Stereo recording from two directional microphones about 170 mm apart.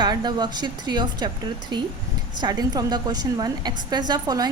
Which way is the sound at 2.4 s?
25° right (ahead or behind).